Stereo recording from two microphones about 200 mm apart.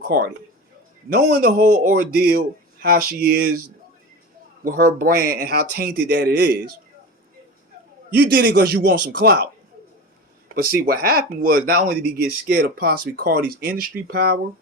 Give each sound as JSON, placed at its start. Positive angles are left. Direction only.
{"t": 0.0, "sound": "speech", "side_deg": -50}
{"t": 4.6, "sound": "speech", "side_deg": -45}
{"t": 8.1, "sound": "speech", "side_deg": -50}
{"t": 10.5, "sound": "speech", "side_deg": -45}